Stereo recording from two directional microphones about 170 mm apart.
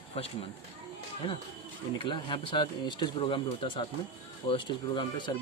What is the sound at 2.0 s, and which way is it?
Speech, 30° left (ahead or behind).